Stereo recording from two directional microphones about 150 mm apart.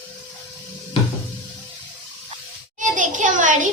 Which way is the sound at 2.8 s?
55° right (ahead or behind).